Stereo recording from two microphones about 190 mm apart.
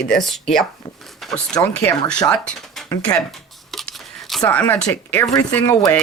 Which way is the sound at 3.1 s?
Centre (ahead or behind).